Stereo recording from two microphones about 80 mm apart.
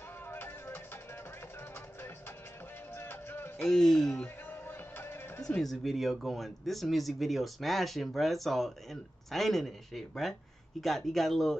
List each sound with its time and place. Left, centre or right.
0.3 s music: left
2.9 s music: left
3.6 s speech: centre
4.5 s music: left
5.6 s speech: centre